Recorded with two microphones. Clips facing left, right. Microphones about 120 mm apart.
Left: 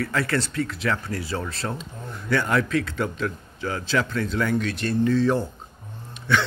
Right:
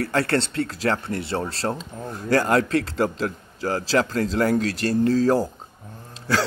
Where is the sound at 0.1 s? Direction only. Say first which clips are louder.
Right 3 dB; 30° right (ahead or behind).